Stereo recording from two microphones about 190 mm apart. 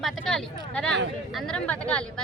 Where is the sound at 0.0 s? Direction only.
5° left (ahead or behind).